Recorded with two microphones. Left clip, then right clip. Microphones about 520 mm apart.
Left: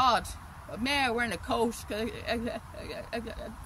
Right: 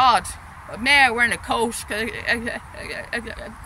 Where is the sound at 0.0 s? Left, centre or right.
Left.